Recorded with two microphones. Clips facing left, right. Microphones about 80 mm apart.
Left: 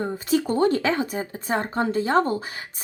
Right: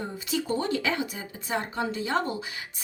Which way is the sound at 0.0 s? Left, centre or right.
Left.